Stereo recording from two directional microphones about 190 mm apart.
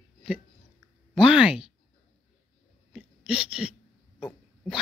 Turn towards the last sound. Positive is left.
turn(degrees=-5)  # may be behind; listen again after turning